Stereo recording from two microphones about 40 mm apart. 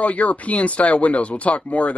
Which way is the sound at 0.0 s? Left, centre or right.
Left.